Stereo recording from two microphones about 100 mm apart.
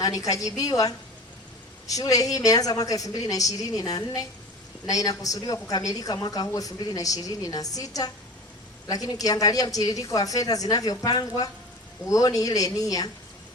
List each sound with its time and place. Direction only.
0.0 s a woman's voice: 35° left (ahead or behind)